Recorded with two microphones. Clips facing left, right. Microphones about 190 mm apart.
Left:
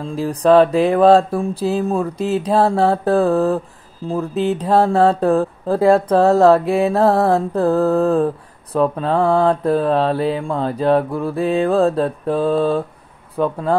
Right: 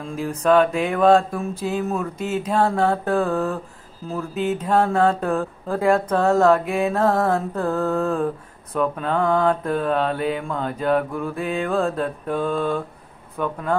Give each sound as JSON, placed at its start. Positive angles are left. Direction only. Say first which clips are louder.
{"t": 0.0, "sound": "speech", "louder": "left 5 dB", "side_deg": 35}